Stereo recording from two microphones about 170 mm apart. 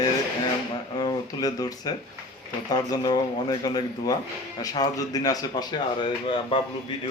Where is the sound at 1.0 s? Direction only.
25° left (ahead or behind).